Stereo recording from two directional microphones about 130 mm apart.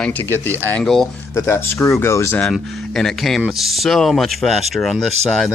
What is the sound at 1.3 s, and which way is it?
Speech, 20° left (ahead or behind).